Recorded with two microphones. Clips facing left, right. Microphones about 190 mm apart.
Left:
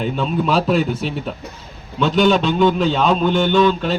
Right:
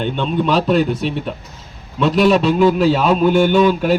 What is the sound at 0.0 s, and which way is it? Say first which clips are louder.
A man's voice: right 1 dB; centre (ahead or behind).